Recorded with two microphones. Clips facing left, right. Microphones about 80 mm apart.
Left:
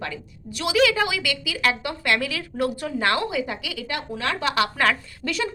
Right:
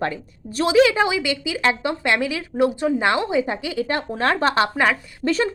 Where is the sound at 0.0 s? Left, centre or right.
Right.